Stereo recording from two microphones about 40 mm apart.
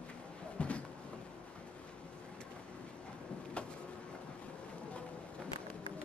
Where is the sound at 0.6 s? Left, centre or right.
Left.